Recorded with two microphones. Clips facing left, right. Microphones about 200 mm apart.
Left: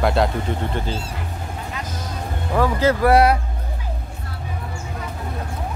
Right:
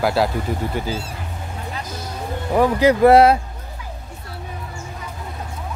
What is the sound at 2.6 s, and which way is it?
Speech, 15° right (ahead or behind).